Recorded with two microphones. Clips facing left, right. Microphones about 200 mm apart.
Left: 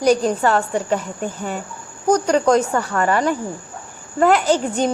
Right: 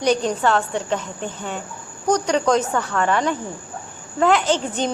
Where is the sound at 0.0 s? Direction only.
5° left (ahead or behind).